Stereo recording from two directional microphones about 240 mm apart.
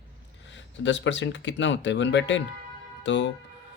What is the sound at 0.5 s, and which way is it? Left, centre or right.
Speech, left.